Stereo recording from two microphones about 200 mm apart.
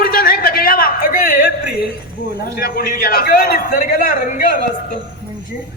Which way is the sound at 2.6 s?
50° left (ahead or behind).